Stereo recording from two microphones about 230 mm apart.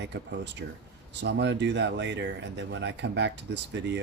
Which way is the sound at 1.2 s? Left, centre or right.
Right.